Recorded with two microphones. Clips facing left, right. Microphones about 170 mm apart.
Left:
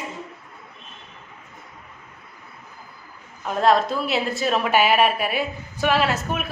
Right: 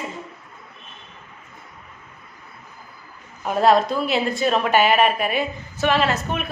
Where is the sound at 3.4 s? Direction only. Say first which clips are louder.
Right 2 dB; 5° right (ahead or behind).